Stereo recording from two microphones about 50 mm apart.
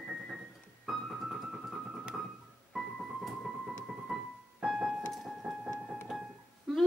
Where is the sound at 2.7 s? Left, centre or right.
Centre.